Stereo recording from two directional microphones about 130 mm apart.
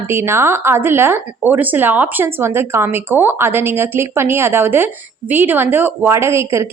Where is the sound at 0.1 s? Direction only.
20° right (ahead or behind).